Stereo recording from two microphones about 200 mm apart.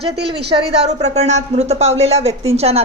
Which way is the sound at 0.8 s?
30° right (ahead or behind).